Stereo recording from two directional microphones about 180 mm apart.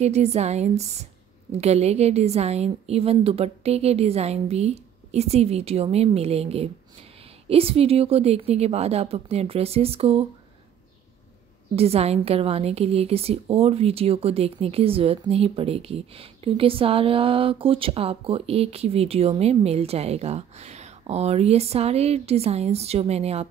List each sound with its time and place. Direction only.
0.0 s a woman's voice: 35° right (ahead or behind)
11.7 s a woman's voice: 35° right (ahead or behind)